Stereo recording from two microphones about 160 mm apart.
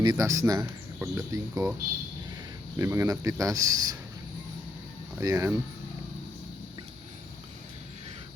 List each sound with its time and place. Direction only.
0.0 s speech: 20° right (ahead or behind)
2.7 s speech: 15° right (ahead or behind)
5.2 s speech: 20° right (ahead or behind)